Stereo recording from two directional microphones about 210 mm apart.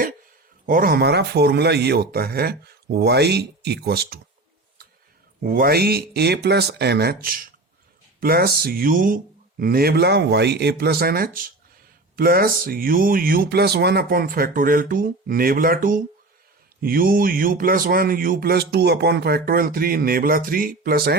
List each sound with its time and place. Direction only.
0.6 s a man's voice: 40° right (ahead or behind)
5.4 s a man's voice: 45° right (ahead or behind)